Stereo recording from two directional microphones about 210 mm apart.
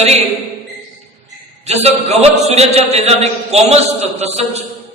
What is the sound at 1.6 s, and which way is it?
A man's voice, 30° right (ahead or behind).